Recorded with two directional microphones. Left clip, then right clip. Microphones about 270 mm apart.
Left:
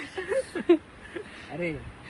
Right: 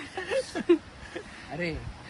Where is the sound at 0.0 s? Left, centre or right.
Right.